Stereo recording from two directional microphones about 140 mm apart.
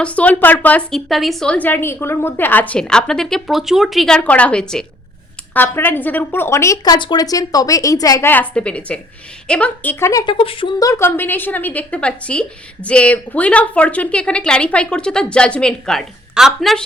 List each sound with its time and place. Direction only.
0.0 s a woman's voice: 10° left (ahead or behind); by 8.3 s 25° left (ahead or behind)
8.3 s a woman's voice: 10° left (ahead or behind)
10.3 s speech: 40° left (ahead or behind)
10.8 s a woman's voice: 20° left (ahead or behind); by 16.8 s centre (ahead or behind)